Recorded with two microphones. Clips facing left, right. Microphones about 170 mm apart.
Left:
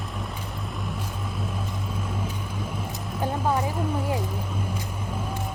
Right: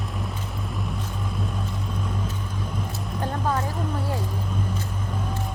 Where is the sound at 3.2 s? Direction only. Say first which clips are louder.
Left 2 dB; 10° left (ahead or behind).